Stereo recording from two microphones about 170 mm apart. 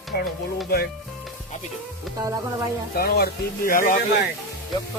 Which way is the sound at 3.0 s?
70° left (ahead or behind).